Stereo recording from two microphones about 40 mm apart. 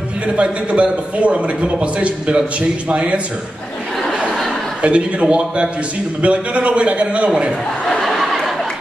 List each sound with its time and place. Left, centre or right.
0.4 s a man's voice: right
4.8 s a man's voice: right
7.9 s a sound: centre